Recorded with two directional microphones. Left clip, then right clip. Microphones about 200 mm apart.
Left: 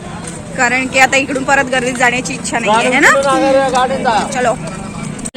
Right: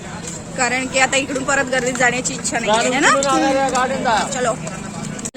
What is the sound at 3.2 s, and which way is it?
Speech, 50° left (ahead or behind).